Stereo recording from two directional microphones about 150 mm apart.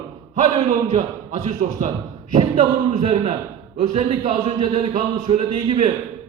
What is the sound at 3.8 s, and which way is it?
A man's voice, 55° right (ahead or behind).